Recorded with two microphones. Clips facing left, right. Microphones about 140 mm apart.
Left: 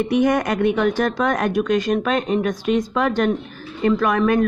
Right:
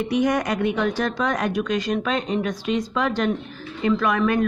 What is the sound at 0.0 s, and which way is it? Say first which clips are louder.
Speech: left 3 dB; 55° left (ahead or behind).